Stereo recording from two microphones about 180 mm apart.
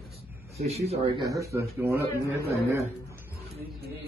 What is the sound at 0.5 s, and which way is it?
Speech, 35° right (ahead or behind).